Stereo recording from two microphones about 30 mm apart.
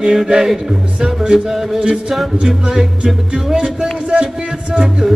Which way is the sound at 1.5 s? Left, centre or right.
Centre.